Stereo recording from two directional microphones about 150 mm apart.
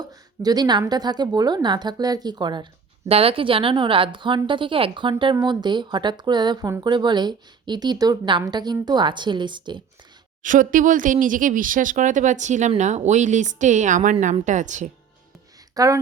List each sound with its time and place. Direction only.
0.0 s speech: 25° right (ahead or behind)
3.1 s a woman's voice: 40° right (ahead or behind)
10.4 s speech: 60° right (ahead or behind)
15.7 s speech: 25° right (ahead or behind)